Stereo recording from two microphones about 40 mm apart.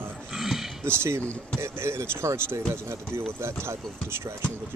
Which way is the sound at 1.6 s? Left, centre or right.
Right.